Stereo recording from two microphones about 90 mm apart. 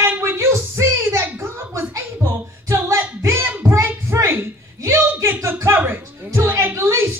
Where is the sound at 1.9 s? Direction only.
30° right (ahead or behind).